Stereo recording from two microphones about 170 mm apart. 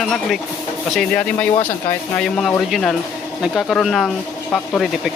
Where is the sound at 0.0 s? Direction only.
Centre (ahead or behind).